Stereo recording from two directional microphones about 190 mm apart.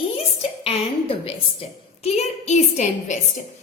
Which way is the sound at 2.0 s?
35° left (ahead or behind).